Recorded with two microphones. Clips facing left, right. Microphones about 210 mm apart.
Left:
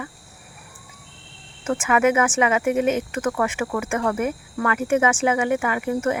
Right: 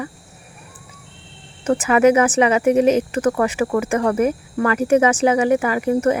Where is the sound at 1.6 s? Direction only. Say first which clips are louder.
Right 5 dB; 35° right (ahead or behind).